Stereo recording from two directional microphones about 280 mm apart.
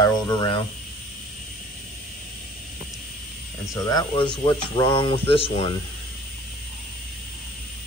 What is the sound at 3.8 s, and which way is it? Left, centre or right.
Speech, centre.